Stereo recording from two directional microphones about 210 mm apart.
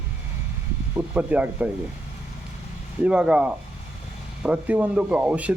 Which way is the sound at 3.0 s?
5° right (ahead or behind).